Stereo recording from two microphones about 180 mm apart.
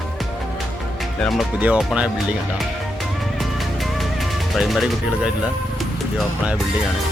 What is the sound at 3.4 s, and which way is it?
Music, centre (ahead or behind).